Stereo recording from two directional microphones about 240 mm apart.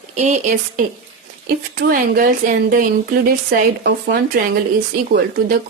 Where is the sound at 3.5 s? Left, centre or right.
Right.